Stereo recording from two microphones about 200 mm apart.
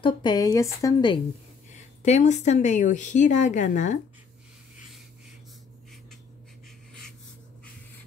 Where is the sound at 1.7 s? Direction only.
35° left (ahead or behind).